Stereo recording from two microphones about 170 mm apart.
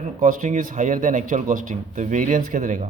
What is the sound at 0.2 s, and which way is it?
Speech, 45° right (ahead or behind).